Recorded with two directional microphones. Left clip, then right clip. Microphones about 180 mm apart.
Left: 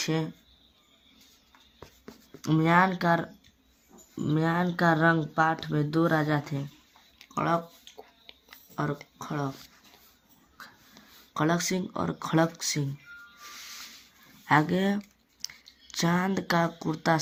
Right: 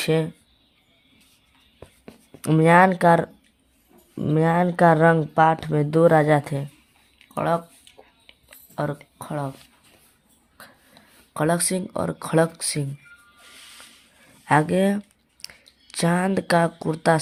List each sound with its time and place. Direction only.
0.0 s speech: 45° right (ahead or behind)
2.4 s speech: 50° right (ahead or behind)
4.4 s speech: 50° right (ahead or behind)
5.1 s speech: 35° right (ahead or behind)
5.4 s speech: 45° right (ahead or behind)
8.7 s speech: 45° right (ahead or behind)
9.1 s a sound: 50° right (ahead or behind)
11.3 s speech: 40° right (ahead or behind)
14.4 s speech: 35° right (ahead or behind)